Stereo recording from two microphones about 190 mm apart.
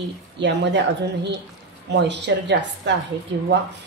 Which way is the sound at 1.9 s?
65° right (ahead or behind).